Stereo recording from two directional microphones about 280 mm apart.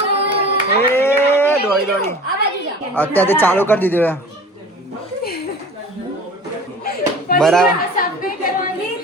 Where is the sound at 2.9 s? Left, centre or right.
Centre.